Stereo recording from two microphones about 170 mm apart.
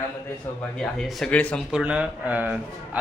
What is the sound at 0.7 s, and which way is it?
Speech, centre (ahead or behind).